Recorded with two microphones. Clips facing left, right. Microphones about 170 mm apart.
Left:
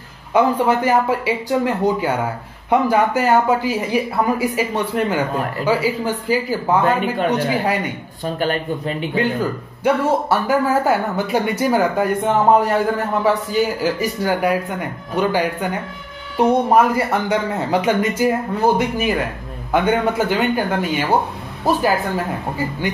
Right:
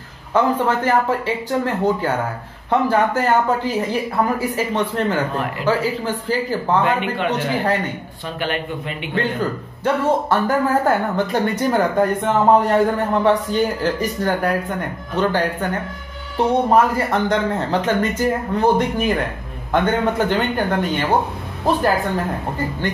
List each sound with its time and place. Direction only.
0.3 s a man's voice: 10° left (ahead or behind)
6.8 s speech: 40° left (ahead or behind)
7.6 s a man's voice: 10° left (ahead or behind)
8.4 s speech: 40° left (ahead or behind)
9.1 s a man's voice: 10° left (ahead or behind)